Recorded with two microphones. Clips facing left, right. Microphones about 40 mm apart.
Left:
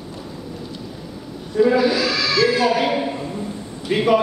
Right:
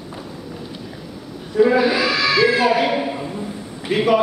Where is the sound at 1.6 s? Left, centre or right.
Centre.